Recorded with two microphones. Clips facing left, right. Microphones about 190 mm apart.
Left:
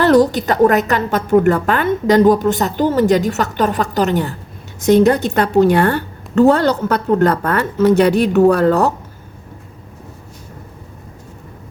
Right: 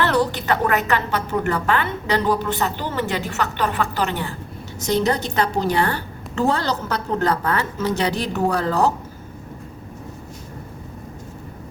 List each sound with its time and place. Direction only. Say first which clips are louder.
0.0 s a woman's voice: left 9 dB; 40° left (ahead or behind)
4.9 s a woman's voice: left 6 dB; 55° left (ahead or behind)